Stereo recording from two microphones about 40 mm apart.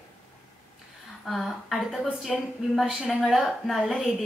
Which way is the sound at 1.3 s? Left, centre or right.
Centre.